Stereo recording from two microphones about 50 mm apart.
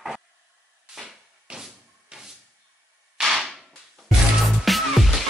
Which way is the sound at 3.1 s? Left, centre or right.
Centre.